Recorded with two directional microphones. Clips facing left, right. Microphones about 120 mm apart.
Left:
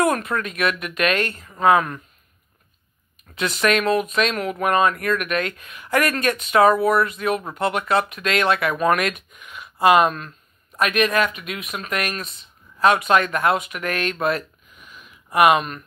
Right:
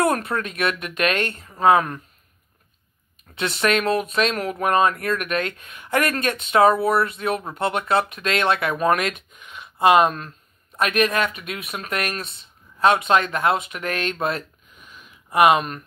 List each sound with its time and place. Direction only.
0.0 s speech: 35° right (ahead or behind)
3.3 s speech: 30° right (ahead or behind)
15.3 s speech: 30° right (ahead or behind)